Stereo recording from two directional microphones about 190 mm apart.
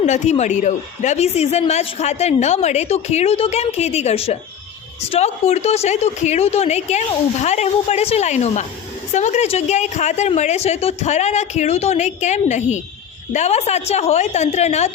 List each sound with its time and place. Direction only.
0.0 s speech: 35° left (ahead or behind)